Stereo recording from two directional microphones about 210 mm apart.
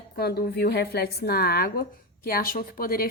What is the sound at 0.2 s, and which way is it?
A woman's voice, 50° left (ahead or behind).